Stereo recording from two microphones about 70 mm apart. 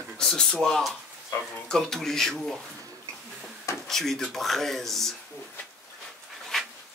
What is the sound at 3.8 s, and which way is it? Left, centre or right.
Speech, centre.